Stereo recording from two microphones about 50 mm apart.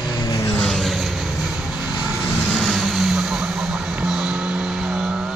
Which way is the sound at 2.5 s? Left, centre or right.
Centre.